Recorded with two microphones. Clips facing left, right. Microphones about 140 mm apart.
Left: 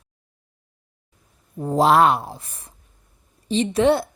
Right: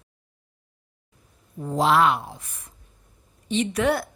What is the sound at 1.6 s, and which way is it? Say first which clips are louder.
Speech: left 4 dB; 40° left (ahead or behind).